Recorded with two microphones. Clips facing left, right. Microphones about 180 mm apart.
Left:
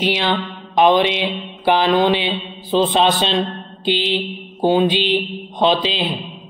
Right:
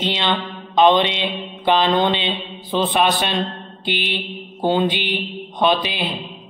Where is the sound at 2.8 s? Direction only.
20° left (ahead or behind).